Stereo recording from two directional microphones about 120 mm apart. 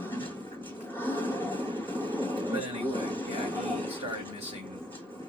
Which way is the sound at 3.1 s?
15° left (ahead or behind).